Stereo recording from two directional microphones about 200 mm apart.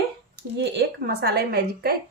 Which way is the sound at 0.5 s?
55° right (ahead or behind).